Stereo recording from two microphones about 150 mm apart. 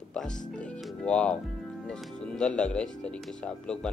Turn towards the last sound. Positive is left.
turn(degrees=5)  # may be behind; listen again after turning